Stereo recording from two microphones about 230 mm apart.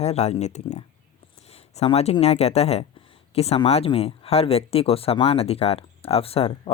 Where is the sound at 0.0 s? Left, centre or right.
Left.